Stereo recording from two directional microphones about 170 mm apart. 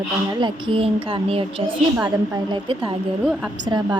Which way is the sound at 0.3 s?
25° right (ahead or behind).